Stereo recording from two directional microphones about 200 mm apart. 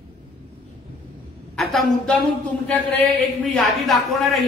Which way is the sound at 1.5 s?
Centre (ahead or behind).